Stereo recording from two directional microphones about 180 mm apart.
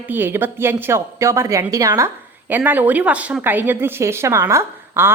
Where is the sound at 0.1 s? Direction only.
10° right (ahead or behind).